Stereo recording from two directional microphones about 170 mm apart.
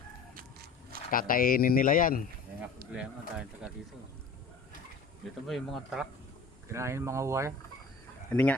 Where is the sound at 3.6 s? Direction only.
5° right (ahead or behind).